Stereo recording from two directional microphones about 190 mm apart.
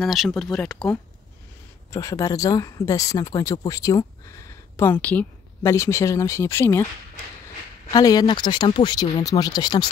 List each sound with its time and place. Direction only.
0.0 s speech: centre (ahead or behind)
1.9 s speech: 15° left (ahead or behind)
7.9 s speech: 20° left (ahead or behind)